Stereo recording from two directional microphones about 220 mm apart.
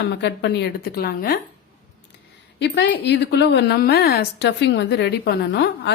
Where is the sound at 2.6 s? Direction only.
50° left (ahead or behind).